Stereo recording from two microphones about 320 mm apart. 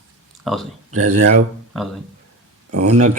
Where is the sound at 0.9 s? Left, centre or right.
Right.